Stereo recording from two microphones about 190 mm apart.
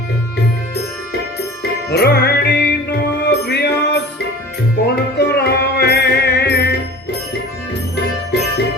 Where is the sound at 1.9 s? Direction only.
60° left (ahead or behind).